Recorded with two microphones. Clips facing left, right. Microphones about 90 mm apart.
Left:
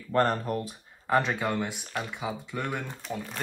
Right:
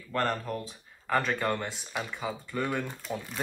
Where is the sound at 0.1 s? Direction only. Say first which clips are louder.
Left 5 dB; 25° left (ahead or behind).